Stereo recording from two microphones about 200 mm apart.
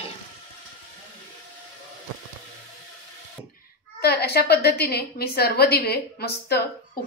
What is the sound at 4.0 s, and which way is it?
A woman's voice, 55° left (ahead or behind).